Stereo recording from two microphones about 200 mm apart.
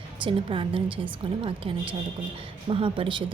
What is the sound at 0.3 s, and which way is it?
Speech, 25° right (ahead or behind).